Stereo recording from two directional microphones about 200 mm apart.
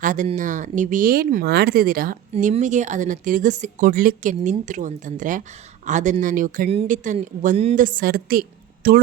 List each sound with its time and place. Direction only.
0.0 s speech: 40° right (ahead or behind)